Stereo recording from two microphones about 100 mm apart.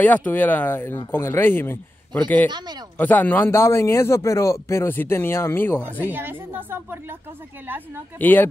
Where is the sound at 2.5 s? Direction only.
45° right (ahead or behind).